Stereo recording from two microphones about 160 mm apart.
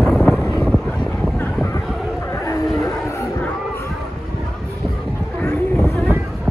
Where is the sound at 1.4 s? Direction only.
10° left (ahead or behind).